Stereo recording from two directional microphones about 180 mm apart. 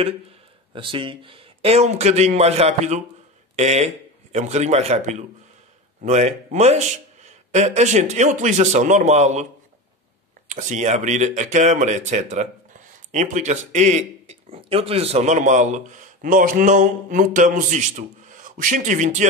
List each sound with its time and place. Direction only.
0.7 s a man's voice: 30° right (ahead or behind)
10.5 s speech: 40° right (ahead or behind)